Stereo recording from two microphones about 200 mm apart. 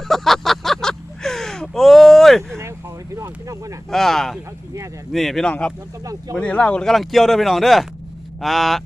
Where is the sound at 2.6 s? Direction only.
15° right (ahead or behind).